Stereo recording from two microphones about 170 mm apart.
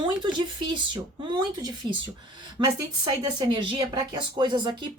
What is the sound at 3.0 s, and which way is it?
Speech, 30° right (ahead or behind).